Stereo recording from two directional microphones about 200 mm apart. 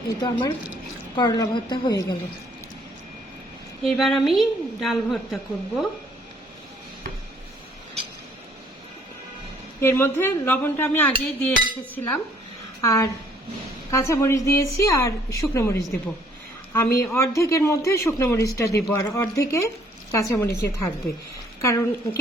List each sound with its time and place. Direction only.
0.2 s a woman's voice: 25° left (ahead or behind)
3.8 s a woman's voice: centre (ahead or behind)
9.8 s a man's voice: 10° left (ahead or behind)